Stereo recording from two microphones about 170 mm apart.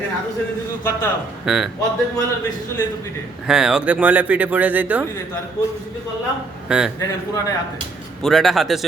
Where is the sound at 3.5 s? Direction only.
5° right (ahead or behind).